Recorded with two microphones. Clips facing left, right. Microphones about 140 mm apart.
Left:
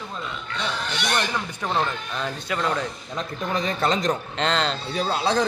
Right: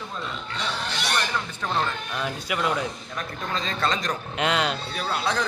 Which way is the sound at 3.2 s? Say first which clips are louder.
Left 5 dB; 20° left (ahead or behind).